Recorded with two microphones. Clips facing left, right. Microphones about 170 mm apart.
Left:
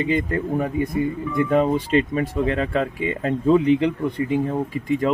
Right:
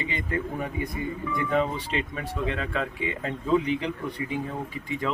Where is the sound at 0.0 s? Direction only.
50° left (ahead or behind).